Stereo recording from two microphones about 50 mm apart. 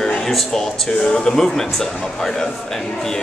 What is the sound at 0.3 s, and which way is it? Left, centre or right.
Speech, centre.